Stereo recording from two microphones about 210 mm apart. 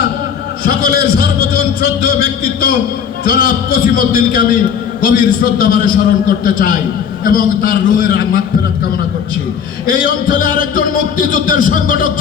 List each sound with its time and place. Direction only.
0.6 s a sound: 45° left (ahead or behind)
3.2 s a man's voice: 45° left (ahead or behind)
9.8 s a man's voice: 40° left (ahead or behind)